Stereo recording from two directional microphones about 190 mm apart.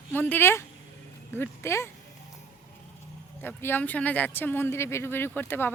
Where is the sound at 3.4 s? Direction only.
10° left (ahead or behind).